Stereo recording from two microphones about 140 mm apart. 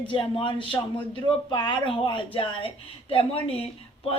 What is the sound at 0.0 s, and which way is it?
A man's voice, 40° left (ahead or behind).